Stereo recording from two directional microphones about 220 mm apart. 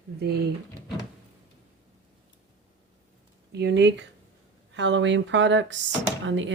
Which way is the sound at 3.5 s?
50° right (ahead or behind).